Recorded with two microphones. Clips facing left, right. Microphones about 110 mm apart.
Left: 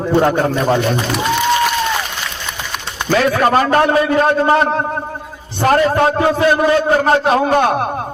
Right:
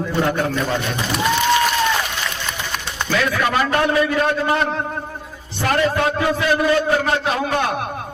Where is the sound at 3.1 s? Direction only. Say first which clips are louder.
Left 7 dB; 40° left (ahead or behind).